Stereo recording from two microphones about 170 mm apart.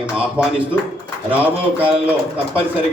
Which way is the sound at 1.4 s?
10° right (ahead or behind).